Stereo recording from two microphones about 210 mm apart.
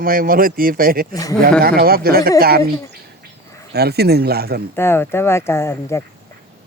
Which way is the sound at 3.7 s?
50° right (ahead or behind).